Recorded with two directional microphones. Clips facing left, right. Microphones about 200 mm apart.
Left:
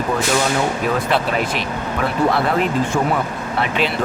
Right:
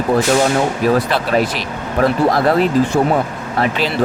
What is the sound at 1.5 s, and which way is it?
Speech, 40° right (ahead or behind).